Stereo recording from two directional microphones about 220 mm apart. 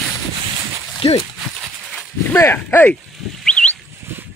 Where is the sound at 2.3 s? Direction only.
10° left (ahead or behind).